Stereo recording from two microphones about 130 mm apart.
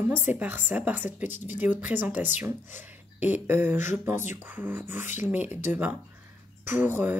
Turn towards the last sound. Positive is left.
turn(degrees=-15)  # may be behind; listen again after turning